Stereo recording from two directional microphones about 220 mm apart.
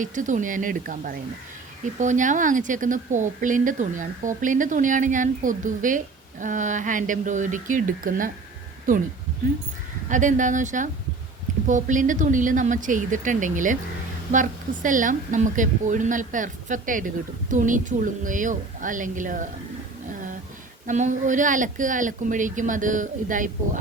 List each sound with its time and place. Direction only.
0.0 s a woman's voice: 35° right (ahead or behind)
10.1 s a woman's voice: 35° right (ahead or behind)
20.8 s a woman's voice: 35° right (ahead or behind)